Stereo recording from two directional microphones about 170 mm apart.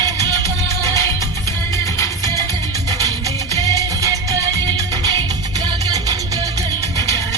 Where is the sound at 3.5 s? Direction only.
20° right (ahead or behind).